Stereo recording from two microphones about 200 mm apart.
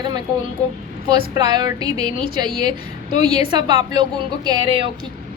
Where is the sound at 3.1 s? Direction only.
35° left (ahead or behind).